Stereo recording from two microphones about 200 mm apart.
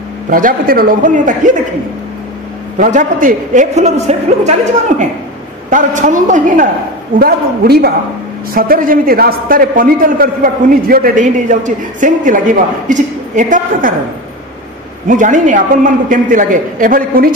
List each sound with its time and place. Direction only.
0.3 s a man's voice: 45° right (ahead or behind)
2.8 s a woman's voice: 40° right (ahead or behind)
7.2 s a man's voice: 50° right (ahead or behind)
15.0 s a woman's voice: 40° right (ahead or behind)